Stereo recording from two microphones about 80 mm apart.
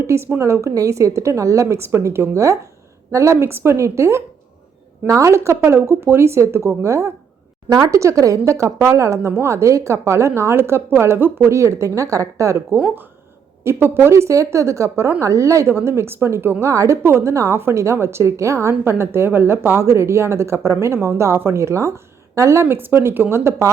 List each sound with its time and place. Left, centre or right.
0.1 s a woman's voice: right
13.7 s a woman's voice: right